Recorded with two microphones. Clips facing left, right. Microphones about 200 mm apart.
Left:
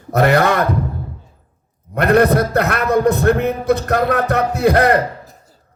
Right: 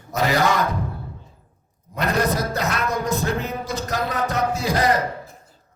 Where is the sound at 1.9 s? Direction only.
60° left (ahead or behind).